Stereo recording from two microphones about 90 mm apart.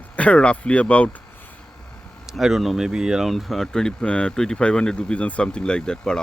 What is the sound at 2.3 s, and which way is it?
Speech, 5° right (ahead or behind).